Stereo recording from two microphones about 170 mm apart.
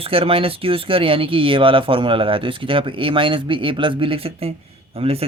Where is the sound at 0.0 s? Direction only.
35° right (ahead or behind).